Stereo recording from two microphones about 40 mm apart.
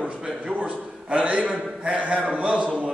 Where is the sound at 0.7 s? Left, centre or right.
Right.